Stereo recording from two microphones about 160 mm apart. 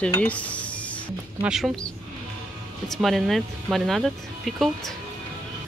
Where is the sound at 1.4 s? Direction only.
5° right (ahead or behind).